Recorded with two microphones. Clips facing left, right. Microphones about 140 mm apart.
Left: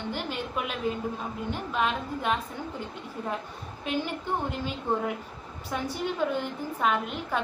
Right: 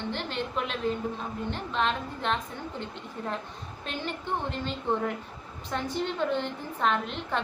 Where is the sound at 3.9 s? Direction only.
10° left (ahead or behind).